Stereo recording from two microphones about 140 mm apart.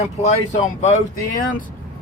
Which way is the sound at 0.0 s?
55° left (ahead or behind).